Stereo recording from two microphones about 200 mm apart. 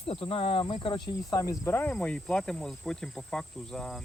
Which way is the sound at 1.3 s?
15° left (ahead or behind).